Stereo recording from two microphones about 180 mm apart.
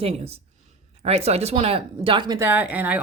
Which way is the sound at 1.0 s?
35° right (ahead or behind).